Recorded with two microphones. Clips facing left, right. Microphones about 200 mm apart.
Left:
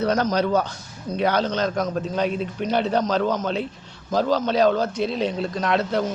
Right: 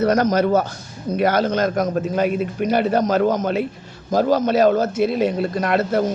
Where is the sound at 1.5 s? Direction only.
50° right (ahead or behind).